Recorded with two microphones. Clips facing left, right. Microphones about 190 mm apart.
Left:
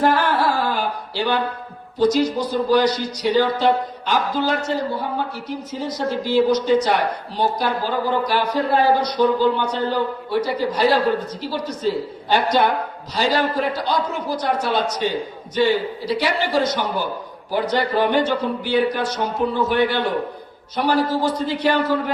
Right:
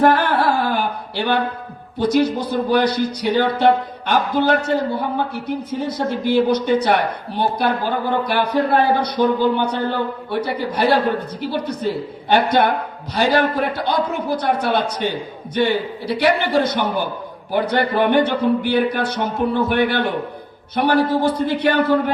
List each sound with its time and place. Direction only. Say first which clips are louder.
0.0 s music: right 3 dB; 60° right (ahead or behind)
2.0 s speech: even; 60° right (ahead or behind)